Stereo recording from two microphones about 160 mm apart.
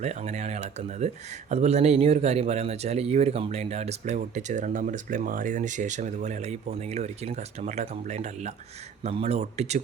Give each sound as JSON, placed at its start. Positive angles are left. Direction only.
{"t": 0.0, "sound": "speech", "side_deg": -45}